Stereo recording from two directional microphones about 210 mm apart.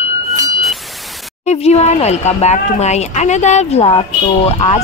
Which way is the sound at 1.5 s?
30° left (ahead or behind).